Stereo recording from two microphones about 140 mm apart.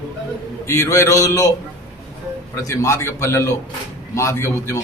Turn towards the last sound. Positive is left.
turn(degrees=20)  # may be behind; listen again after turning